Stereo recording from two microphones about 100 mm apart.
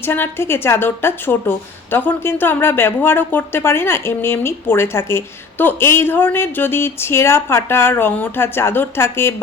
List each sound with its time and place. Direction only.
0.0 s a woman's voice: 20° left (ahead or behind)